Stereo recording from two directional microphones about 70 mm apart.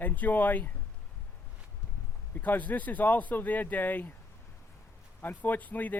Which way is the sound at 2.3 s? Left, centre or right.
Left.